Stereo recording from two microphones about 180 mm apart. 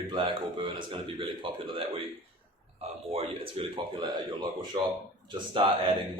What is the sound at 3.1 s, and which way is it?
Speech, 30° right (ahead or behind).